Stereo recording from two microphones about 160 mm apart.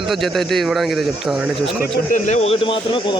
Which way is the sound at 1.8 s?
55° left (ahead or behind).